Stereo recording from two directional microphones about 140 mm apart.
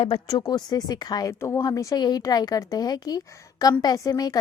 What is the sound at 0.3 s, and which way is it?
A woman's voice, 25° left (ahead or behind).